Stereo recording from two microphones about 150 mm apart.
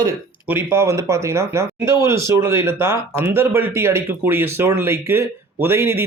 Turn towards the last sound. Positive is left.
turn(degrees=-15)  # may be behind; listen again after turning